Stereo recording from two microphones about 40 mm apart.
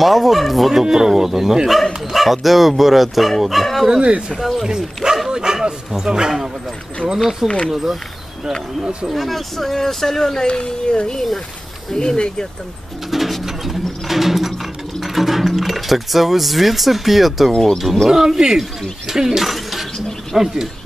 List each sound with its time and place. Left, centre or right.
0.0 s speech: centre
4.6 s speech: centre
7.4 s speech: centre
9.1 s speech: centre
13.1 s bird: centre
15.0 s speech: centre
18.0 s speech: centre